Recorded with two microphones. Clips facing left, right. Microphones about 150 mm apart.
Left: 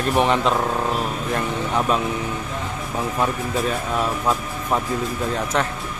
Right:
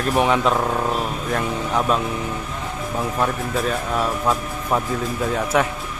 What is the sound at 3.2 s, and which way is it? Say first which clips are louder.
A man's voice: even; centre (ahead or behind).